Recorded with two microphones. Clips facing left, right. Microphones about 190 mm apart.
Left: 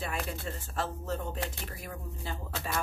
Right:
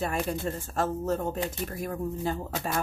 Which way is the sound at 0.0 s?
45° right (ahead or behind).